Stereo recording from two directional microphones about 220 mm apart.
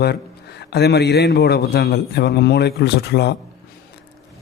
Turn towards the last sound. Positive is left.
turn(degrees=50)  # may be behind; listen again after turning